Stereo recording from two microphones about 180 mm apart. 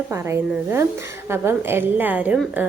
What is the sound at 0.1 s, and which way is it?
Speech, 15° right (ahead or behind).